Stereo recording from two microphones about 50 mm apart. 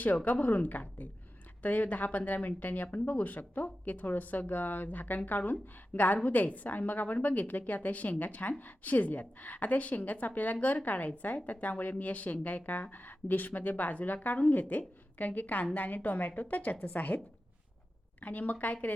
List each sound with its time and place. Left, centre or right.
0.3 s a woman's voice: left
18.2 s a woman's voice: left